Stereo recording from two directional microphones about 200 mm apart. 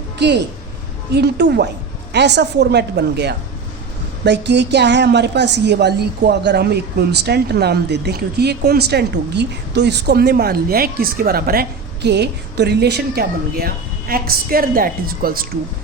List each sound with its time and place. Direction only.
0.2 s a woman's voice: 60° right (ahead or behind)